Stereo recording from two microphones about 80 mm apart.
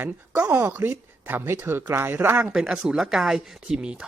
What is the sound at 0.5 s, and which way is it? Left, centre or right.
Speech, right.